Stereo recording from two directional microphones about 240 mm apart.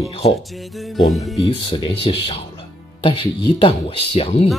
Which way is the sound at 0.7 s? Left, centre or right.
Centre.